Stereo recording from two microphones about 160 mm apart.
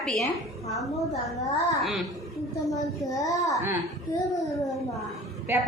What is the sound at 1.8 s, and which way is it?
Speech, centre (ahead or behind).